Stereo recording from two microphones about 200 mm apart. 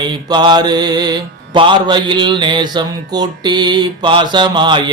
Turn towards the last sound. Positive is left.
turn(degrees=-20)  # may be behind; listen again after turning